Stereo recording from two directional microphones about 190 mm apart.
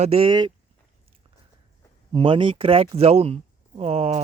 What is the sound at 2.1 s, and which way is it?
Speech, 25° right (ahead or behind).